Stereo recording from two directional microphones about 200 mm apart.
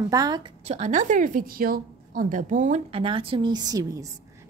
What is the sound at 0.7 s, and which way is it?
A woman's voice, 35° right (ahead or behind).